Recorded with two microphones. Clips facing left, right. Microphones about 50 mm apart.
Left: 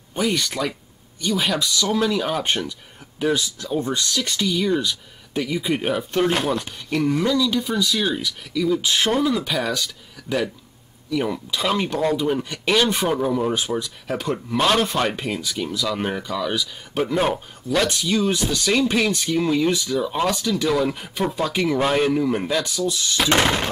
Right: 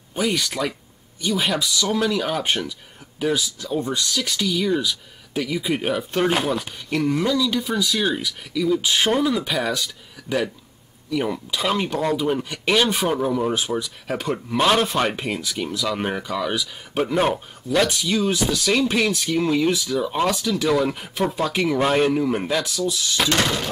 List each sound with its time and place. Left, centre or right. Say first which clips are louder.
0.1 s speech: even; centre
11.1 s speech: even; centre
23.3 s a sound: left 5 dB; left